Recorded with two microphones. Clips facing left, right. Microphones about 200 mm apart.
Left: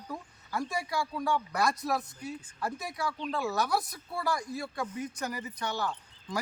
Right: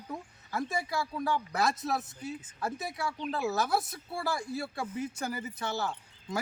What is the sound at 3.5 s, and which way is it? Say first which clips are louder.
Speech: even; 25° right (ahead or behind).